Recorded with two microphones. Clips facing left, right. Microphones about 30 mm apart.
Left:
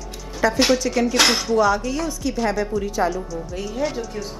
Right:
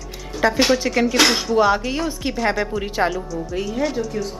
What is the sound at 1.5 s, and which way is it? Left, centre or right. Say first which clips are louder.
A woman's voice: right 1 dB; right.